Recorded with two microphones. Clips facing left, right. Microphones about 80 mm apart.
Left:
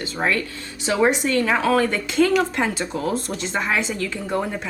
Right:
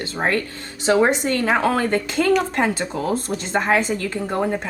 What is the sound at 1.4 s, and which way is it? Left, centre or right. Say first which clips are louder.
Speech: right 5 dB; right.